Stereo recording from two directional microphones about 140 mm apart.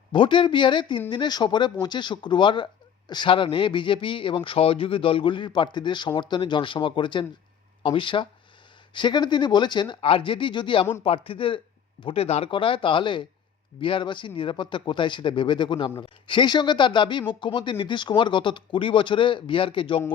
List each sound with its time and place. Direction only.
0.1 s speech: 35° left (ahead or behind)